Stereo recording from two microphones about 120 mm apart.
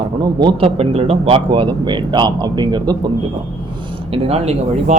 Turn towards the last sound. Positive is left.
turn(degrees=-70)  # may be behind; listen again after turning